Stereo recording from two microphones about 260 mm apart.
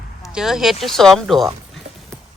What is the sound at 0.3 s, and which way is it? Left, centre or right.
Speech, centre.